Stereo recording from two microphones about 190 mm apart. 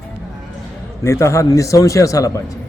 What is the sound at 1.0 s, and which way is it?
A man's voice, 15° left (ahead or behind).